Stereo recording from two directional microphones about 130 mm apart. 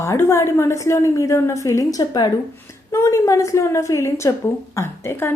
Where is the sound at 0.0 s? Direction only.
20° left (ahead or behind).